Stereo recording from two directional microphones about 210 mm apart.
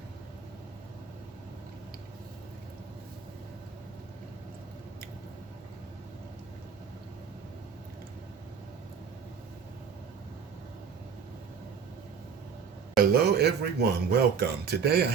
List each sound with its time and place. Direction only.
13.0 s speech: 50° right (ahead or behind)